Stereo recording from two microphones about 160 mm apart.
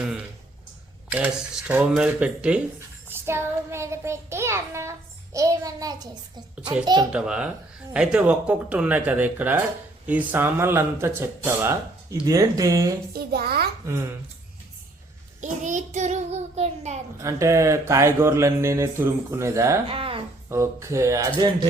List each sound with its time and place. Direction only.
1.1 s child singing: 5° right (ahead or behind); by 6.1 s 25° right (ahead or behind)
7.1 s a child's voice: 5° right (ahead or behind)
7.9 s child singing: 5° right (ahead or behind)
12.2 s speech: 20° right (ahead or behind)
13.1 s a child's voice: 75° right (ahead or behind)
15.4 s child singing: 50° right (ahead or behind)
17.2 s child singing: 20° right (ahead or behind)
19.9 s speech: 35° right (ahead or behind)
20.5 s speech: 20° right (ahead or behind)